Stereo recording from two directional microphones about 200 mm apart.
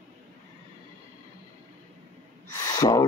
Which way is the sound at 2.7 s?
20° left (ahead or behind).